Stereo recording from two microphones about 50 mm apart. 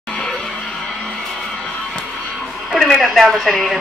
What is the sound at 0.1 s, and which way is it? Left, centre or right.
Music, centre.